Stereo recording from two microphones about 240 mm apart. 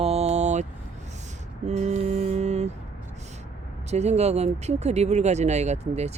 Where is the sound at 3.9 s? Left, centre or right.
Right.